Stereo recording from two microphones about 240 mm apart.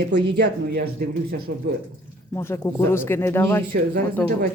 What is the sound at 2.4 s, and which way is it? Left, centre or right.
Speech, centre.